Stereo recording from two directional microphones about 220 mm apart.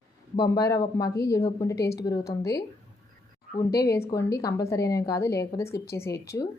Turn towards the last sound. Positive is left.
turn(degrees=15)  # may be behind; listen again after turning